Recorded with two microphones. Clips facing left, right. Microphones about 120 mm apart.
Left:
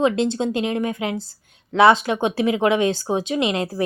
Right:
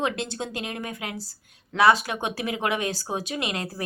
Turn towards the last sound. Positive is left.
turn(degrees=25)  # may be behind; listen again after turning